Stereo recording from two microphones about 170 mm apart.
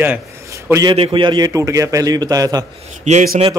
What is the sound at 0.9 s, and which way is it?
A man's voice, 30° right (ahead or behind).